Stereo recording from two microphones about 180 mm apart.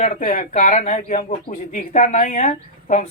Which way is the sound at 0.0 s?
45° left (ahead or behind).